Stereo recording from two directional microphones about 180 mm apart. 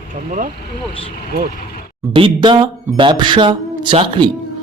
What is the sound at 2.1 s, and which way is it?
Speech, 25° right (ahead or behind).